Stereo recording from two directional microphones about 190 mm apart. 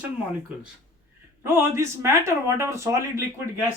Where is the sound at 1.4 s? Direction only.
15° right (ahead or behind).